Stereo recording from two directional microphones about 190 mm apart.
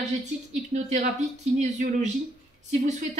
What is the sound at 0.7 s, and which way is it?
Speech, 35° right (ahead or behind).